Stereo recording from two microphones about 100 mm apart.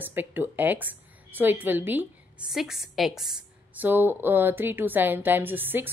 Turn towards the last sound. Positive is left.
turn(degrees=-20)  # may be behind; listen again after turning